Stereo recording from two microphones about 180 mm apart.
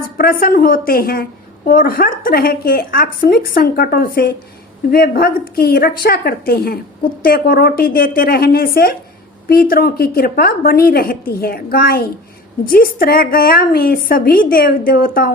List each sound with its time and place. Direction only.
0.2 s a woman's voice: 55° left (ahead or behind)